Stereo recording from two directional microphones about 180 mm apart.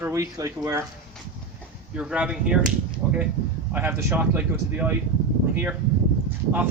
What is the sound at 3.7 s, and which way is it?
Speech, 10° right (ahead or behind).